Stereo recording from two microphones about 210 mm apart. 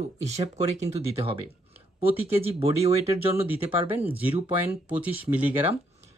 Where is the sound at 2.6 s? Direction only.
30° right (ahead or behind).